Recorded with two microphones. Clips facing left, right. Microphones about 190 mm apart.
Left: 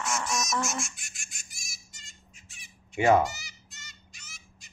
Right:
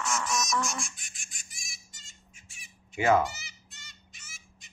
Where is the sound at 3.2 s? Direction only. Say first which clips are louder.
Left 2 dB; centre (ahead or behind).